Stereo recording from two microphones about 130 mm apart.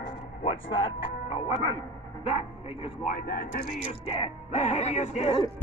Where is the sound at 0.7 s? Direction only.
45° left (ahead or behind).